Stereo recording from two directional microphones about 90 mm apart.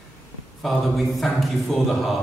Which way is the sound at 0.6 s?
Centre (ahead or behind).